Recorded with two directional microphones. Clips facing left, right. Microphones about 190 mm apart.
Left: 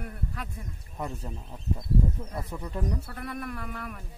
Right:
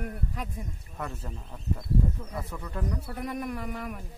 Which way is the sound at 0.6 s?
15° right (ahead or behind).